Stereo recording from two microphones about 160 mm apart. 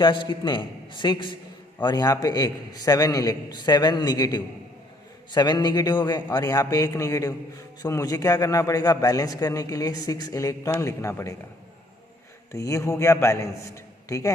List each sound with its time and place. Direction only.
0.0 s a man's voice: 30° left (ahead or behind)
12.5 s a man's voice: 20° left (ahead or behind)